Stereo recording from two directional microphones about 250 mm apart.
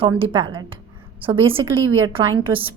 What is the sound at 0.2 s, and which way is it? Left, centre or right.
A woman's voice, centre.